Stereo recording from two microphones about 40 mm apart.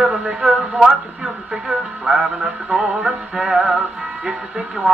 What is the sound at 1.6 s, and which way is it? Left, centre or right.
Music, centre.